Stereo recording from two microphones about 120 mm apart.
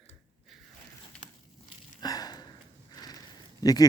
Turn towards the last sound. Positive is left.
turn(degrees=30)  # may be behind; listen again after turning